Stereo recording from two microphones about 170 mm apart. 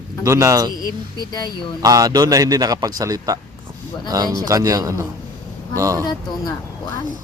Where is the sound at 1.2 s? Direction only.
25° left (ahead or behind).